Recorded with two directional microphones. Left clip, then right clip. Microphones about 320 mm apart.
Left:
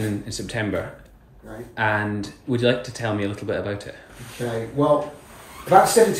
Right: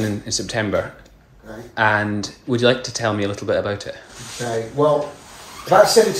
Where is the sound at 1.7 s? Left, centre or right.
Centre.